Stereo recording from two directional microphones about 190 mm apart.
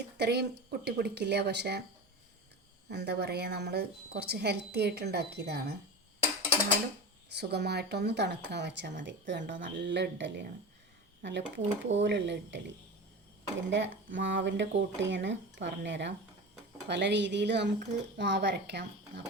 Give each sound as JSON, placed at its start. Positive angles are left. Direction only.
{"t": 0.2, "sound": "a woman's voice", "side_deg": -60}
{"t": 2.9, "sound": "a woman's voice", "side_deg": -60}
{"t": 7.3, "sound": "a woman's voice", "side_deg": -60}
{"t": 13.7, "sound": "a woman's voice", "side_deg": -70}